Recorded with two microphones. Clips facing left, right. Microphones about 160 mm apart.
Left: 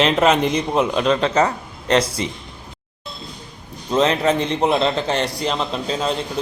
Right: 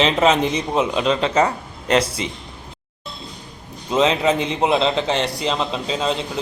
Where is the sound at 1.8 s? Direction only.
35° left (ahead or behind).